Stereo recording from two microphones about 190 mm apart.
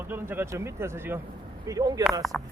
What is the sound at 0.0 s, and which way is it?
Speech, 10° right (ahead or behind).